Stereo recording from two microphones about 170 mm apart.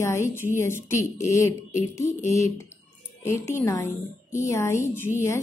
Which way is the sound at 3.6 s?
20° left (ahead or behind).